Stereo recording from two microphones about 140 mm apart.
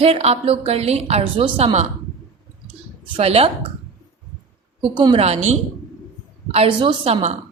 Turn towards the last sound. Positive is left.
turn(degrees=-50)  # may be behind; listen again after turning